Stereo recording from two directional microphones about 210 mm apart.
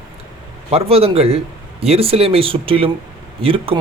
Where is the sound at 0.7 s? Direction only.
30° right (ahead or behind).